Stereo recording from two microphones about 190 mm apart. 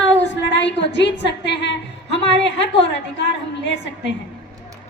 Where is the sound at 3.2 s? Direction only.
70° left (ahead or behind).